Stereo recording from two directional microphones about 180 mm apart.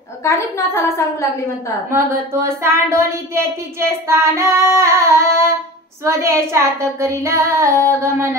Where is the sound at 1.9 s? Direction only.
15° right (ahead or behind).